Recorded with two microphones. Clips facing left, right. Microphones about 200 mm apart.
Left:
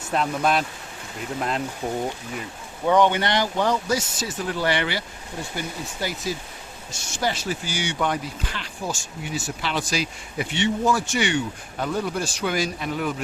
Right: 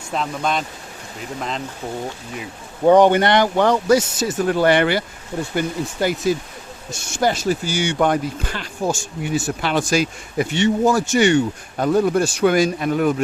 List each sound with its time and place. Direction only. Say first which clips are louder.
0.1 s speech: even; 5° left (ahead or behind)
1.8 s speech: left 1 dB; 15° left (ahead or behind)
2.8 s speech: right 7 dB; 40° right (ahead or behind)